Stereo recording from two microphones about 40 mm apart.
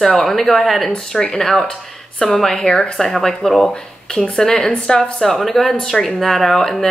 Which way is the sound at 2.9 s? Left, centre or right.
Centre.